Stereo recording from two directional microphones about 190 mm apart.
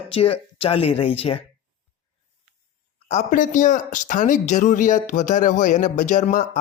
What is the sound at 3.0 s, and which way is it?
Speech, 40° left (ahead or behind).